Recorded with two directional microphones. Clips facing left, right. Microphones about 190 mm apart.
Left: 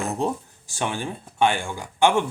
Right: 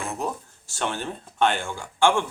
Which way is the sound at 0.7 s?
10° left (ahead or behind).